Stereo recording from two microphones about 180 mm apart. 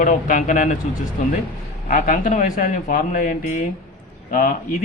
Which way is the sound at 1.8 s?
45° left (ahead or behind).